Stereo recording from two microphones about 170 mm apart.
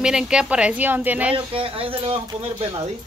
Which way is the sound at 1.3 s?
30° right (ahead or behind).